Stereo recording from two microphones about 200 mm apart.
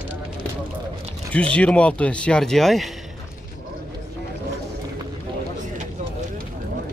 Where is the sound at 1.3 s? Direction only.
5° left (ahead or behind).